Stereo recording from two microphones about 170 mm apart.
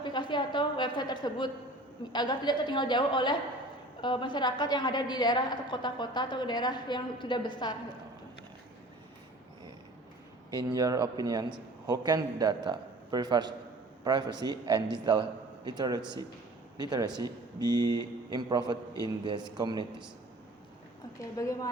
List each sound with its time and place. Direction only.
0.0 s a woman's voice: 25° left (ahead or behind)
10.5 s a man's voice: 25° right (ahead or behind)
21.3 s a woman's voice: 20° left (ahead or behind)